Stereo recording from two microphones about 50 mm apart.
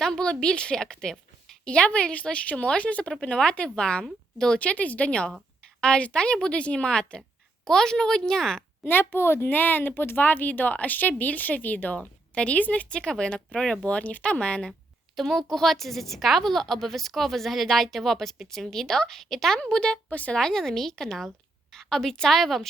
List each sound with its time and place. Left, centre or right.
0.0 s a woman's voice: centre
3.1 s a woman's voice: centre
4.6 s a woman's voice: left; by 8.6 s centre
8.8 s a woman's voice: left
12.3 s a woman's voice: left
13.8 s a woman's voice: left
14.7 s a woman's voice: centre
19.5 s a woman's voice: centre
20.1 s speech: left
20.3 s a woman's voice: centre